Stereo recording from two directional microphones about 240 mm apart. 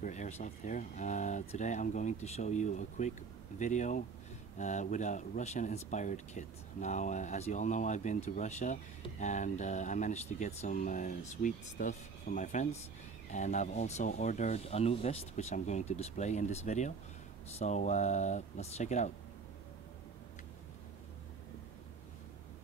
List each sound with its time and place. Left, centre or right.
0.0 s speech: left